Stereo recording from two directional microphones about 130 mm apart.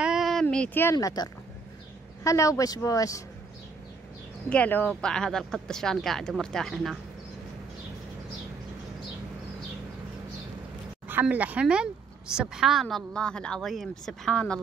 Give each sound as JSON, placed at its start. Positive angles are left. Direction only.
{"t": 0.0, "sound": "a sound", "side_deg": -5}
{"t": 0.9, "sound": "speech", "side_deg": 30}
{"t": 4.5, "sound": "a woman's voice", "side_deg": 15}
{"t": 11.1, "sound": "a woman's voice", "side_deg": -15}